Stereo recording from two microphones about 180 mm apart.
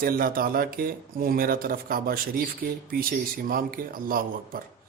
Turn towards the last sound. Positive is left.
turn(degrees=-55)  # may be behind; listen again after turning